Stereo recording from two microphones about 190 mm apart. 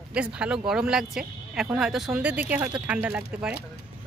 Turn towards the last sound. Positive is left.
turn(degrees=-5)  # may be behind; listen again after turning